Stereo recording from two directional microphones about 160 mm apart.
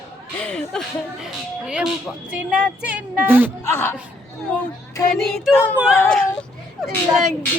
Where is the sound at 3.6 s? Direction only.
15° left (ahead or behind).